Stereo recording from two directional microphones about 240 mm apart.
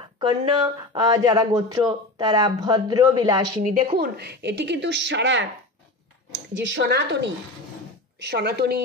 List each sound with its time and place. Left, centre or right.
0.2 s speech: centre
3.6 s a woman's voice: right
6.5 s a woman's voice: right
8.3 s a woman's voice: right